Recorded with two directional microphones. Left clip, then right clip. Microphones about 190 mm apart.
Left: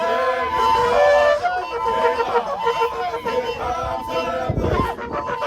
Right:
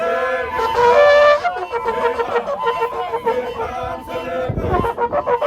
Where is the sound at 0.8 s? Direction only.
15° right (ahead or behind).